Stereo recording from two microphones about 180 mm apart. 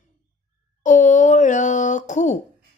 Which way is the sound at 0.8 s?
45° left (ahead or behind).